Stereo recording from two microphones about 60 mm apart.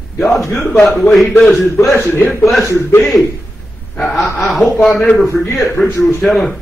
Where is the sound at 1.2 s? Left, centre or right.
Left.